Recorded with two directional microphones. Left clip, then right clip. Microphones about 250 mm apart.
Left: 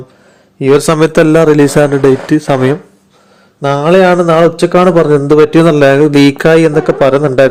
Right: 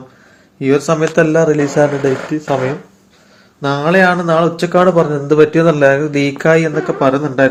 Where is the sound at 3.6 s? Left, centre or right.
Left.